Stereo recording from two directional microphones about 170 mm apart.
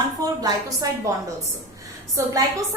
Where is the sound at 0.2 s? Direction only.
20° right (ahead or behind).